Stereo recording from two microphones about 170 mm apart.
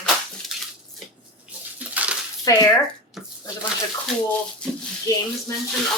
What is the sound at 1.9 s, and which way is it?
Coin, 10° right (ahead or behind).